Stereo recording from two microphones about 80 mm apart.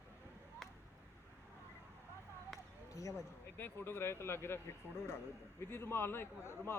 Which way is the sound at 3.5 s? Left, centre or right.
Left.